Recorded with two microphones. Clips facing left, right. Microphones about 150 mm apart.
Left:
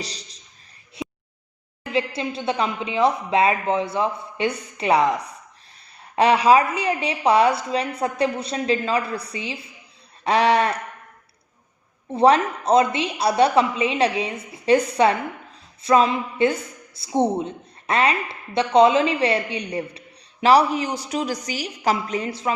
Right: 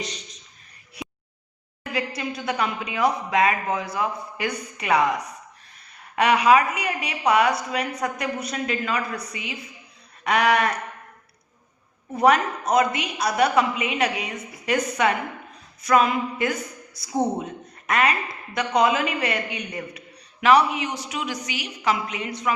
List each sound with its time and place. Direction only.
0.0 s speech: 35° left (ahead or behind)
1.0 s a sound: 25° left (ahead or behind)
1.9 s a woman's voice: 25° left (ahead or behind)
12.1 s a woman's voice: 30° left (ahead or behind)